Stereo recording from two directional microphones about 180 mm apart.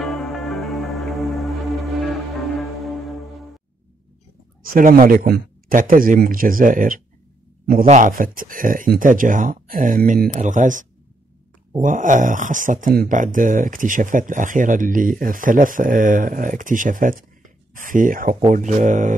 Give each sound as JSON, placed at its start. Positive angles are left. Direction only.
{"t": 0.0, "sound": "music", "side_deg": 0}
{"t": 4.6, "sound": "speech", "side_deg": -50}